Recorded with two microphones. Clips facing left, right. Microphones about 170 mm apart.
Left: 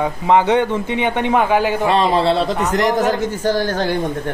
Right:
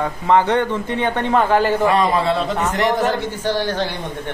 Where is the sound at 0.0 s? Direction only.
15° left (ahead or behind).